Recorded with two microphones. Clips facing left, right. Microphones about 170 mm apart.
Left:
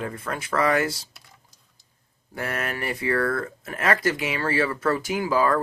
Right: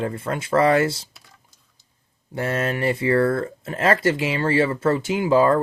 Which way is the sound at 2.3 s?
25° right (ahead or behind).